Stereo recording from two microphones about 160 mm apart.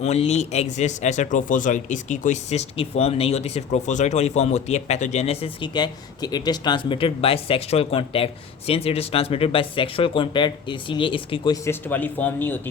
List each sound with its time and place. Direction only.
0.0 s a man's voice: 45° left (ahead or behind)
11.5 s a man's voice: 15° left (ahead or behind)